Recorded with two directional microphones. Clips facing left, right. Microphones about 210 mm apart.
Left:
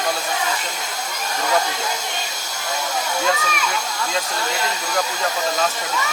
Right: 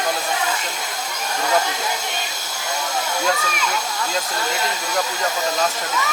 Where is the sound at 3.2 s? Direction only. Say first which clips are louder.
Left 1 dB; centre (ahead or behind).